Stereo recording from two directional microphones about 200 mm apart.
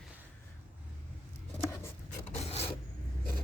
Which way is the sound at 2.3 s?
30° left (ahead or behind).